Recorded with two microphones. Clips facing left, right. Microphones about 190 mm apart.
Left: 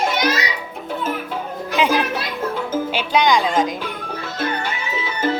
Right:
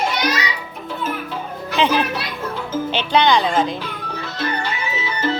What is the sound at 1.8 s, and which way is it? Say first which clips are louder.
Chatter: even; 10° left (ahead or behind).